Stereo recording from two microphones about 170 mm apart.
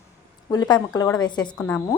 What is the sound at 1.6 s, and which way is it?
Speech, 15° left (ahead or behind).